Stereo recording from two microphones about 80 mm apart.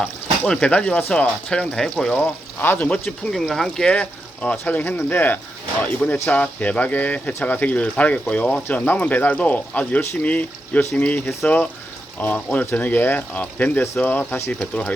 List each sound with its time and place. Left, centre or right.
0.0 s speech: centre
2.1 s speech: centre
3.3 s speech: centre
3.9 s speech: centre